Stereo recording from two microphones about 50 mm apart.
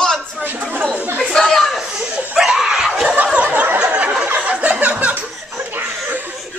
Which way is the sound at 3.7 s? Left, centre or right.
Centre.